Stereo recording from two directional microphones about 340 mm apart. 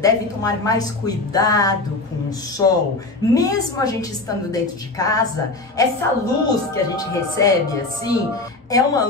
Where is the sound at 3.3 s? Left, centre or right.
Centre.